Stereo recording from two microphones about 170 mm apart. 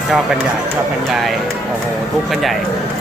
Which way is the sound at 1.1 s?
Centre (ahead or behind).